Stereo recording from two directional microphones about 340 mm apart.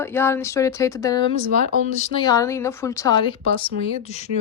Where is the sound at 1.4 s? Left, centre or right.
Right.